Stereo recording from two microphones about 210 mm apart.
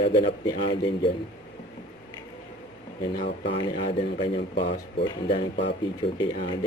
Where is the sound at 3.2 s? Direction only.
55° left (ahead or behind).